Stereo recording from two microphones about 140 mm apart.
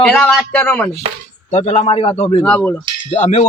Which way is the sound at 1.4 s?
55° left (ahead or behind).